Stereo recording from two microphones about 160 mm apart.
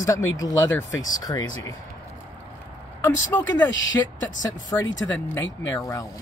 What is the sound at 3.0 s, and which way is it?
Speech, 10° left (ahead or behind).